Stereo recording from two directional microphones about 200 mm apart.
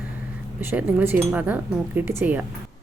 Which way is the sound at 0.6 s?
10° right (ahead or behind).